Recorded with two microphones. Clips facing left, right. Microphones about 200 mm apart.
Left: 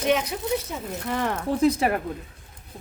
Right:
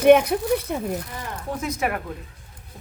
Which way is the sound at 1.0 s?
70° left (ahead or behind).